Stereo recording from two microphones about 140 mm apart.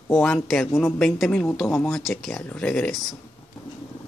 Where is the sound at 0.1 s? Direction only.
5° left (ahead or behind).